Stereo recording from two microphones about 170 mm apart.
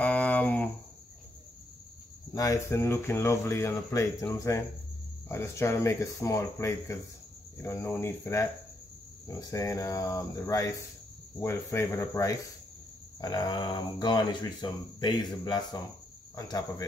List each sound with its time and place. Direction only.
0.0 s a sound: 10° left (ahead or behind)
2.3 s speech: 20° left (ahead or behind)
9.5 s speech: 20° left (ahead or behind)